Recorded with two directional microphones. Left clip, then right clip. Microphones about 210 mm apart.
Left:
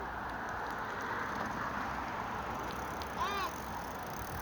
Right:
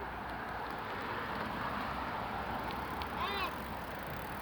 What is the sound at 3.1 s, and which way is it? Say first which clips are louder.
Vehicle: left 1 dB; 5° left (ahead or behind).